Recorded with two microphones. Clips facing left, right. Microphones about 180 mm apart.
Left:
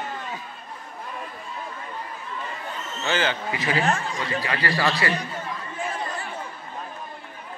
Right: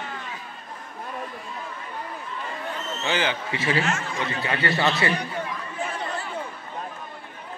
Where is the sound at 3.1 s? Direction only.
15° right (ahead or behind).